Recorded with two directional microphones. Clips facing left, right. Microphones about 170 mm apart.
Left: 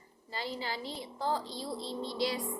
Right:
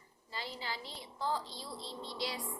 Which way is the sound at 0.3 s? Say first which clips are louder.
Left 5 dB; 40° left (ahead or behind).